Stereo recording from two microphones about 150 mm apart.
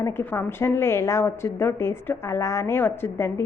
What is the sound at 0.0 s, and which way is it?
A woman's voice, 15° left (ahead or behind).